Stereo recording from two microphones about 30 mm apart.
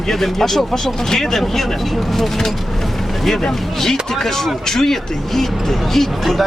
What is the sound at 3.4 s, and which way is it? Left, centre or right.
Speech, centre.